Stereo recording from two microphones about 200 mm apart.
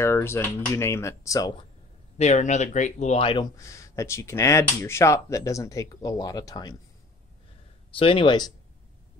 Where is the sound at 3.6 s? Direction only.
15° left (ahead or behind).